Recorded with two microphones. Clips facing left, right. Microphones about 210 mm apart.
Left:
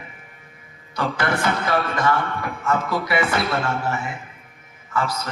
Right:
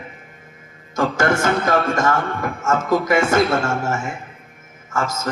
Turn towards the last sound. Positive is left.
turn(degrees=-45)  # may be behind; listen again after turning